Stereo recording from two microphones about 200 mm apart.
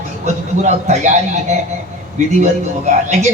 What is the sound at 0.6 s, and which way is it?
Speech, 35° right (ahead or behind).